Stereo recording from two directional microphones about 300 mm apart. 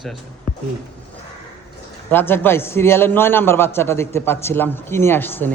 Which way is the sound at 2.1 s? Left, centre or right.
Centre.